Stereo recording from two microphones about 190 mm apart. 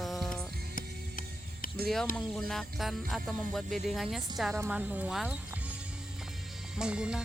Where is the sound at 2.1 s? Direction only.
5° left (ahead or behind).